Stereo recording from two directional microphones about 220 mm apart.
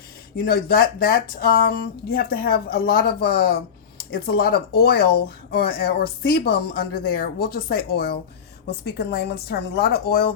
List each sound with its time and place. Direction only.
0.3 s speech: 40° left (ahead or behind)